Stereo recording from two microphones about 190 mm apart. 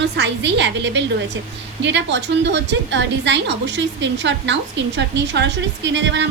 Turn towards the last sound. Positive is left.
turn(degrees=-70)  # may be behind; listen again after turning